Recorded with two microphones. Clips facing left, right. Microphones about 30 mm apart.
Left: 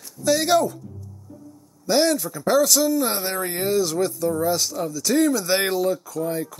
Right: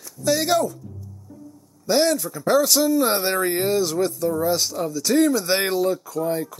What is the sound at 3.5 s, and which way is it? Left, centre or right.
Speech, centre.